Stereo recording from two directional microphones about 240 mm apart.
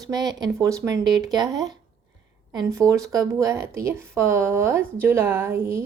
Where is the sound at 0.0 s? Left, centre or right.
Centre.